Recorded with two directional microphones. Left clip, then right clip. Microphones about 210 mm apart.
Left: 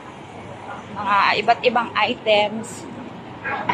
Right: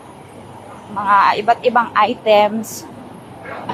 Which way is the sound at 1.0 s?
10° right (ahead or behind).